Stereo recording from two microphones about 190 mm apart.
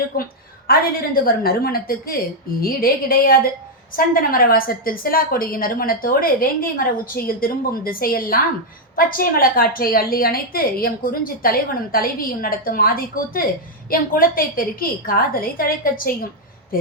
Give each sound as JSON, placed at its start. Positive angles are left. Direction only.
{"t": 0.1, "sound": "a woman's voice", "side_deg": 50}